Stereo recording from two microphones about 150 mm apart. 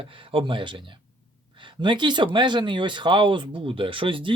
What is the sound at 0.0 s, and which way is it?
Speech, 35° right (ahead or behind).